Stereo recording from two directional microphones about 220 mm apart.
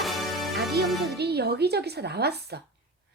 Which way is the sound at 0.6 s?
45° right (ahead or behind).